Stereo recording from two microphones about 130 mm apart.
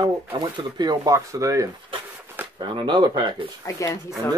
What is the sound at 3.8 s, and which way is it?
Speech, 25° left (ahead or behind).